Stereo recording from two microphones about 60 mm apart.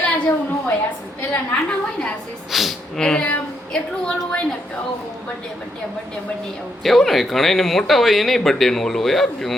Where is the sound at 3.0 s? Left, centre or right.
Centre.